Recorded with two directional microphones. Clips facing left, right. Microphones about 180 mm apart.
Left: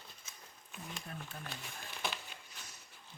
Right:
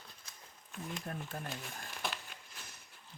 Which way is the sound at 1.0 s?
45° right (ahead or behind).